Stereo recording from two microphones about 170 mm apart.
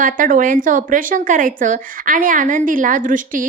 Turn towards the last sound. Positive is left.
turn(degrees=-50)  # may be behind; listen again after turning